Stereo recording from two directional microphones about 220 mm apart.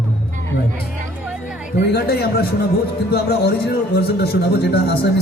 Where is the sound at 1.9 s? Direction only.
45° left (ahead or behind).